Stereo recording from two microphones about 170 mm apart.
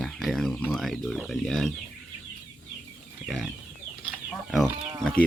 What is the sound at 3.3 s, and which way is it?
Chicken, centre (ahead or behind).